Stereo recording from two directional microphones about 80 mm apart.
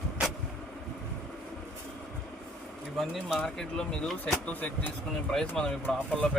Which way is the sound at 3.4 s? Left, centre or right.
Centre.